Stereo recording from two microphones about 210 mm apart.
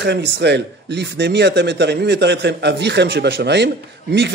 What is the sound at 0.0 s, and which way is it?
A man's voice, 55° right (ahead or behind).